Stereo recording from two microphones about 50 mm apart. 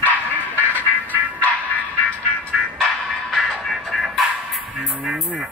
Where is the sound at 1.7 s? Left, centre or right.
Left.